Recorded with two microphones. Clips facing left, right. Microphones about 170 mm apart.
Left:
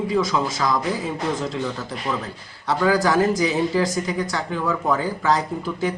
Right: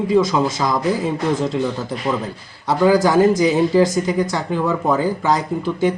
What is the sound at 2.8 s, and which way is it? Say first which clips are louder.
Speech: right 5 dB; 25° right (ahead or behind).